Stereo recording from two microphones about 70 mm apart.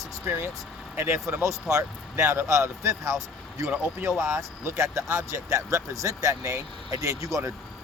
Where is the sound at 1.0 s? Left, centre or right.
Right.